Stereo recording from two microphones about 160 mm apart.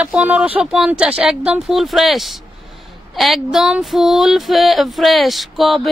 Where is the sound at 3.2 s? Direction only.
Centre (ahead or behind).